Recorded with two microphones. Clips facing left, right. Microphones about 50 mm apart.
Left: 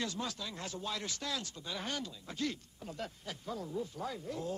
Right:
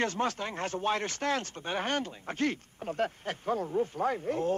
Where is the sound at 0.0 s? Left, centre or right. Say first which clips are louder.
Right 9 dB; right.